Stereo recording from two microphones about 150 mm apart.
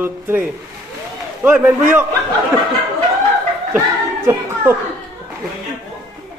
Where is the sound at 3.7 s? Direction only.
20° right (ahead or behind).